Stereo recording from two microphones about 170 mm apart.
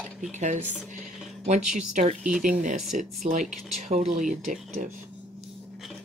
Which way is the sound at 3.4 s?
Centre (ahead or behind).